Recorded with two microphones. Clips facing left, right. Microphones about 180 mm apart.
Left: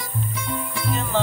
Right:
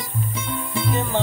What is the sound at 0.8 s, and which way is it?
Music, 20° right (ahead or behind).